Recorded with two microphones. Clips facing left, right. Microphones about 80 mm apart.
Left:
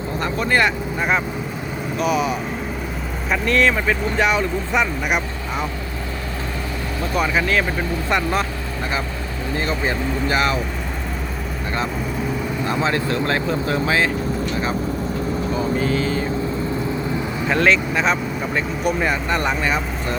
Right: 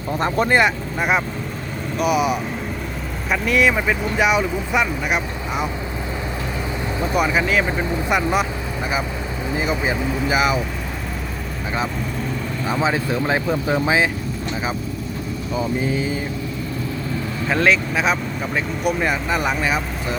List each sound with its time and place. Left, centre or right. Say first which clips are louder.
0.4 s speech: right 1 dB; centre
0.9 s speech: even; centre
7.0 s speech: right 1 dB; centre
9.5 s speech: right 1 dB; centre
12.8 s speech: right 1 dB; centre
15.5 s speech: right 1 dB; centre
17.5 s speech: even; centre